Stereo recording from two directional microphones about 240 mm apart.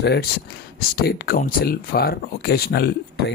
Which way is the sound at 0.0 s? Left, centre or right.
Left.